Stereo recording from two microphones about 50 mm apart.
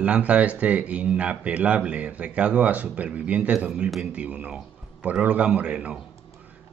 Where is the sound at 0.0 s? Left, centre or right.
Right.